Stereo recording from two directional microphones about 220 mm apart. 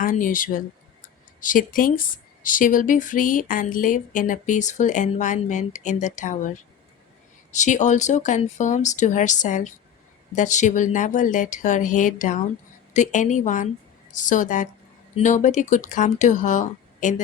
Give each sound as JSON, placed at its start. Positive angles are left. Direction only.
{"t": 0.0, "sound": "speech", "side_deg": 35}
{"t": 7.5, "sound": "speech", "side_deg": 35}